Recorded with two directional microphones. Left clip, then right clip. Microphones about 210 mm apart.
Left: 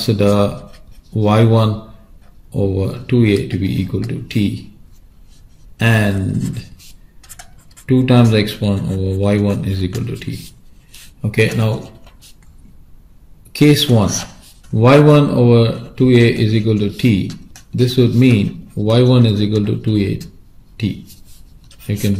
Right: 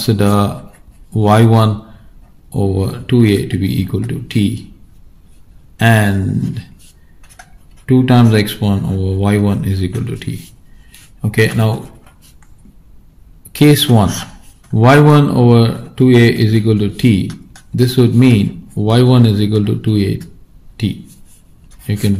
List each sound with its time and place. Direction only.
0.0 s speech: 35° right (ahead or behind)
5.8 s speech: 35° right (ahead or behind)
7.8 s speech: 30° right (ahead or behind)
13.6 s speech: 35° right (ahead or behind)
21.8 s speech: 35° right (ahead or behind)